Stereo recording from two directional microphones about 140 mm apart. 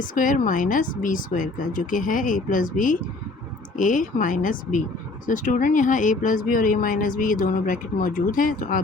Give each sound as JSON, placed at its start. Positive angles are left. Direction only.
{"t": 0.0, "sound": "speech", "side_deg": 75}